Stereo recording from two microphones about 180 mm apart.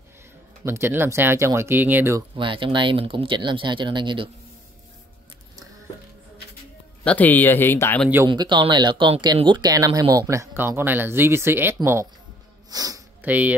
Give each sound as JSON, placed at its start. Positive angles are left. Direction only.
{"t": 0.7, "sound": "speech", "side_deg": -15}
{"t": 2.3, "sound": "speech", "side_deg": -30}
{"t": 7.1, "sound": "speech", "side_deg": 10}
{"t": 8.3, "sound": "speech", "side_deg": -25}
{"t": 13.2, "sound": "speech", "side_deg": -10}